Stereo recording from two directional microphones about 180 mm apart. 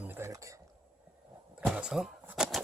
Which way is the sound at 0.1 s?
15° right (ahead or behind).